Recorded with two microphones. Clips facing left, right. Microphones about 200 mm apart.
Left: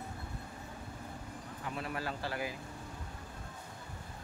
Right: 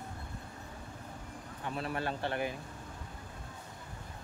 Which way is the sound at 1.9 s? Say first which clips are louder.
Right 5 dB; 25° right (ahead or behind).